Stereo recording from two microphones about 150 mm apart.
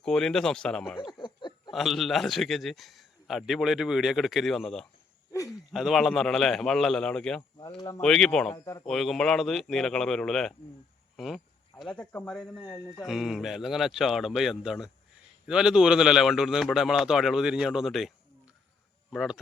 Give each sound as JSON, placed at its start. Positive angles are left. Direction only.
{"t": 0.0, "sound": "a man's voice", "side_deg": 5}
{"t": 1.1, "sound": "a sound", "side_deg": 30}
{"t": 1.7, "sound": "a man's voice", "side_deg": 0}
{"t": 7.8, "sound": "speech", "side_deg": 25}
{"t": 8.0, "sound": "a man's voice", "side_deg": 5}
{"t": 8.5, "sound": "speech", "side_deg": 20}
{"t": 8.8, "sound": "a man's voice", "side_deg": 0}
{"t": 11.8, "sound": "a man's voice", "side_deg": 5}